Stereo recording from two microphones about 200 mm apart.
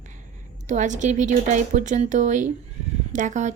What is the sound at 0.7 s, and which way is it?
Speech, 40° right (ahead or behind).